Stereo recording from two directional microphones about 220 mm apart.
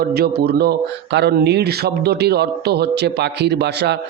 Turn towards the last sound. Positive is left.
turn(degrees=-50)  # may be behind; listen again after turning